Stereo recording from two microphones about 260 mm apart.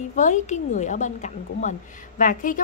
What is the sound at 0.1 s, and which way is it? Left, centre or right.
A woman's voice, left.